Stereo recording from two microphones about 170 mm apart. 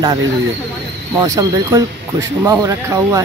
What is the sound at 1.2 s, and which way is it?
Speech, 20° right (ahead or behind).